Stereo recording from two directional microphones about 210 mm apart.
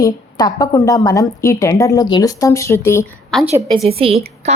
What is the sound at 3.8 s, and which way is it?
Speech, 25° right (ahead or behind).